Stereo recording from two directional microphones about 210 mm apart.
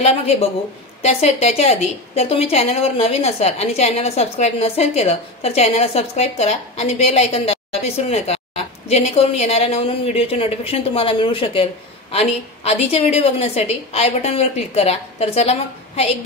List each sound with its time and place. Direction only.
0.0 s a woman's voice: 30° left (ahead or behind)